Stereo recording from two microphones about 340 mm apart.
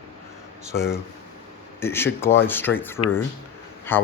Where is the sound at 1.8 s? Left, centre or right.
Centre.